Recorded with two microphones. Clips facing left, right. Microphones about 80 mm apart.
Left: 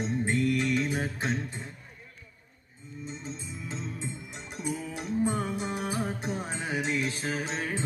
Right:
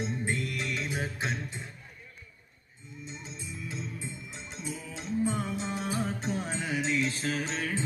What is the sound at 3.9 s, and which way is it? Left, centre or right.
Music, left.